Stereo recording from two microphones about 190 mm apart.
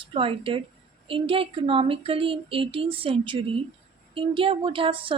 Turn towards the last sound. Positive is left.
turn(degrees=-25)  # may be behind; listen again after turning